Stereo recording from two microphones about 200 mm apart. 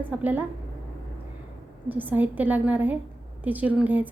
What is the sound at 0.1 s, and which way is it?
Speech, 10° right (ahead or behind).